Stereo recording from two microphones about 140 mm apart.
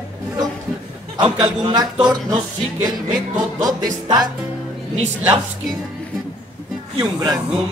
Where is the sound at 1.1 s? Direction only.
30° right (ahead or behind).